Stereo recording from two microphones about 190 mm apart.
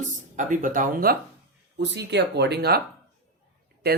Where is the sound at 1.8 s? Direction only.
65° right (ahead or behind).